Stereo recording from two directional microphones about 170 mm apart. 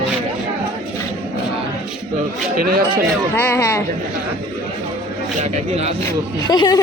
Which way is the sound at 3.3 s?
15° left (ahead or behind).